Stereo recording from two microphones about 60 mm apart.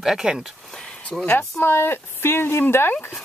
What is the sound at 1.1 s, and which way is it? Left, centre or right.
Speech, centre.